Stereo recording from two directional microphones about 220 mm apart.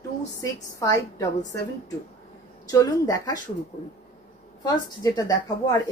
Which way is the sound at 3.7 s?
30° left (ahead or behind).